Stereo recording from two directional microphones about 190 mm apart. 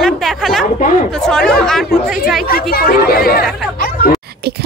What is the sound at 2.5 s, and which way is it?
Speech, 50° left (ahead or behind).